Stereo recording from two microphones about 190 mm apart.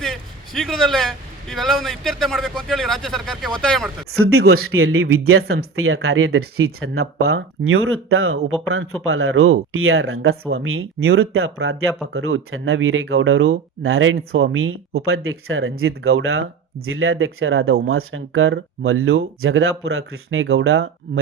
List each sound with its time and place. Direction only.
0.0 s a man's voice: centre (ahead or behind)
4.2 s speech: 90° right